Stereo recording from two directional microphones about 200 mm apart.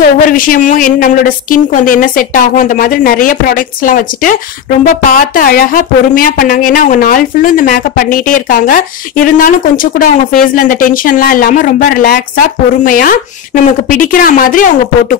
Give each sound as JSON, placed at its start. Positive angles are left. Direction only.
{"t": 0.3, "sound": "a woman's voice", "side_deg": 45}